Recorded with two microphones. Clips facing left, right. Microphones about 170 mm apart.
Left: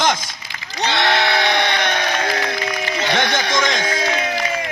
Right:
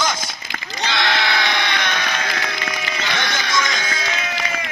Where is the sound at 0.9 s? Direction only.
55° left (ahead or behind).